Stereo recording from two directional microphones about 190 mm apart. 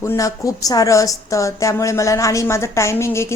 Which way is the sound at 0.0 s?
15° left (ahead or behind).